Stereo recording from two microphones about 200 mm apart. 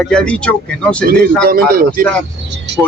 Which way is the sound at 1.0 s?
50° right (ahead or behind).